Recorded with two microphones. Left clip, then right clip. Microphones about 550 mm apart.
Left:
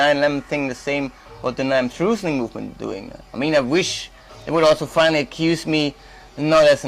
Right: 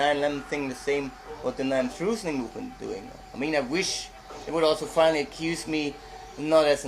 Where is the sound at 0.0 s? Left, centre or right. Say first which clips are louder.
Left 8 dB; left.